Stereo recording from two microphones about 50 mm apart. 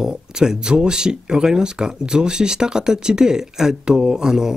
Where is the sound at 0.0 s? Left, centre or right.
Centre.